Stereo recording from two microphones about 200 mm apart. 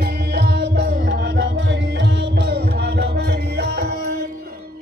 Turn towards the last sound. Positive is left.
turn(degrees=-55)  # may be behind; listen again after turning